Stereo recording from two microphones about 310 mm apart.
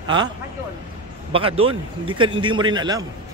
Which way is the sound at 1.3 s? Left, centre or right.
Centre.